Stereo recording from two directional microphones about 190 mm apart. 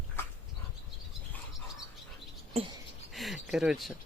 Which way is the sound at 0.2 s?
10° left (ahead or behind).